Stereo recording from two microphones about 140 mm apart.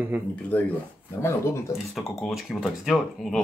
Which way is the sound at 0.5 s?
10° left (ahead or behind).